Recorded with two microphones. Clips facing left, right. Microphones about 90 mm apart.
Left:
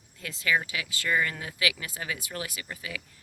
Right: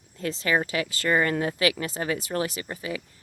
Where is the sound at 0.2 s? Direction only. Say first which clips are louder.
Right 4 dB; 35° right (ahead or behind).